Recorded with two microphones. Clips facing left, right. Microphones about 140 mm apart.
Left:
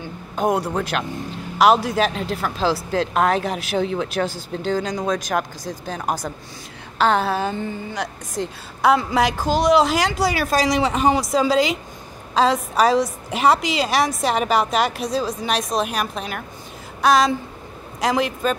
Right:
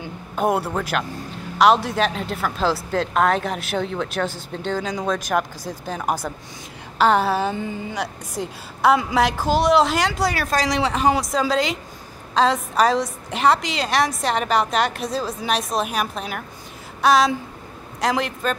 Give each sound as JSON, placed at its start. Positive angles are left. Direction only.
{"t": 0.4, "sound": "a woman's voice", "side_deg": -5}